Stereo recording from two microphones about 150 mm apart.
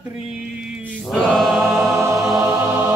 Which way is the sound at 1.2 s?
5° left (ahead or behind).